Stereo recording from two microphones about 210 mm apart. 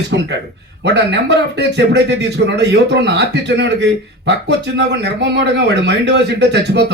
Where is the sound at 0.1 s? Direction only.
60° right (ahead or behind).